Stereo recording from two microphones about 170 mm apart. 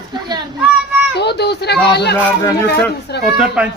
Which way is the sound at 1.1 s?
75° left (ahead or behind).